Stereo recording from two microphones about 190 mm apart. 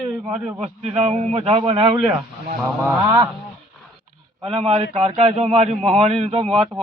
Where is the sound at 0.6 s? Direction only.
35° right (ahead or behind).